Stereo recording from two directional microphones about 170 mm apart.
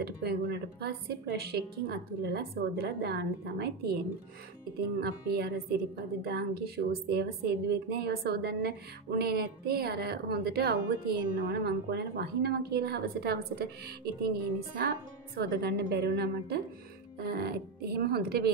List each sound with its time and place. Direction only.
0.0 s speech: 70° right (ahead or behind)
5.0 s speech: 70° right (ahead or behind)
11.3 s speech: 80° right
15.3 s speech: 70° right (ahead or behind)